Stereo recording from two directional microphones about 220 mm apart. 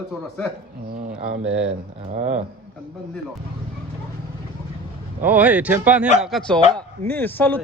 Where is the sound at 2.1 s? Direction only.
35° right (ahead or behind).